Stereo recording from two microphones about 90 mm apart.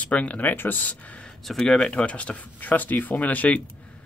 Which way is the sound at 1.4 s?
5° left (ahead or behind).